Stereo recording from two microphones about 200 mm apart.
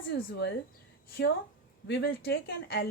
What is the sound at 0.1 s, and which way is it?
Speech, 60° left (ahead or behind).